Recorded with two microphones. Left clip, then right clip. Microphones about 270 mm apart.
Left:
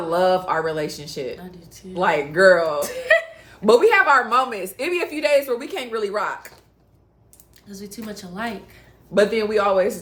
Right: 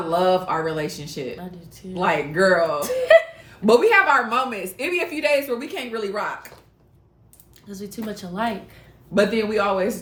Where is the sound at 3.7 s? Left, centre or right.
Centre.